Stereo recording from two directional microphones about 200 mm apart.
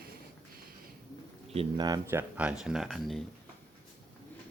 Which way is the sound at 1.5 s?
20° right (ahead or behind).